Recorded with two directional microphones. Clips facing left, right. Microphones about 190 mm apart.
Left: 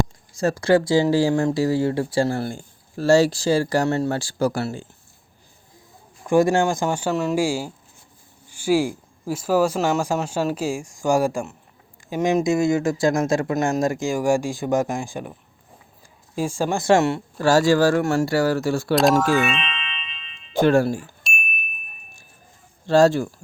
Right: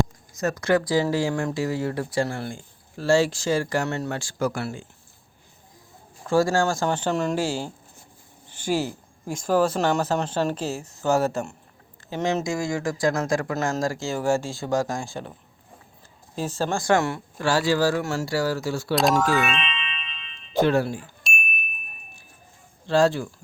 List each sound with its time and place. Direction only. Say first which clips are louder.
0.3 s speech: left 4 dB; 30° left (ahead or behind)
6.2 s speech: left 3 dB; 20° left (ahead or behind)
16.3 s speech: left 3 dB; 10° left (ahead or behind)
16.8 s speech: left 5 dB; 25° left (ahead or behind)
17.3 s speech: left 5 dB; 45° left (ahead or behind)
18.9 s speech: left 3 dB; centre (ahead or behind)
20.5 s speech: left 4 dB; 45° left (ahead or behind)
21.2 s a sound: right 2 dB; centre (ahead or behind)
22.9 s speech: left 4 dB; 45° left (ahead or behind)